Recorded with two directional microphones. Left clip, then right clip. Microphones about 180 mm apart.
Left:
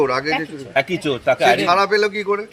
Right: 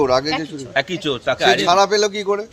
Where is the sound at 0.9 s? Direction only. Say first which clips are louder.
Left 2 dB; 30° left (ahead or behind).